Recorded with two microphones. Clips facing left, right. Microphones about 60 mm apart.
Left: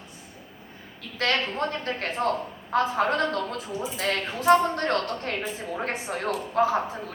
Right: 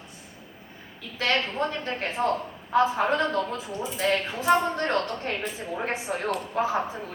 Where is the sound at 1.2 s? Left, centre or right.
Left.